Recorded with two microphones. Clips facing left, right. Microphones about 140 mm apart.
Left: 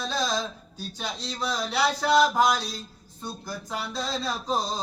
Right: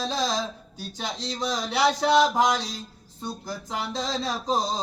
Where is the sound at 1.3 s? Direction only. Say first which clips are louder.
Right 1 dB; 25° right (ahead or behind).